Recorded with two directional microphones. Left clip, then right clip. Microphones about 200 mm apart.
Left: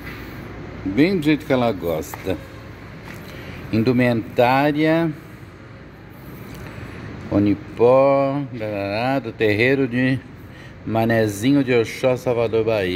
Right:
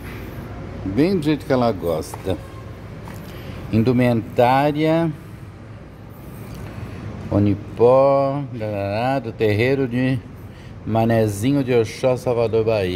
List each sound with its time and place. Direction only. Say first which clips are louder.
1.2 s speech: even; 5° left (ahead or behind)
3.7 s speech: even; centre (ahead or behind)
7.2 s speech: left 1 dB; centre (ahead or behind)